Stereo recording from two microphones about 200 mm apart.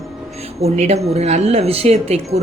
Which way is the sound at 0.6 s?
30° right (ahead or behind).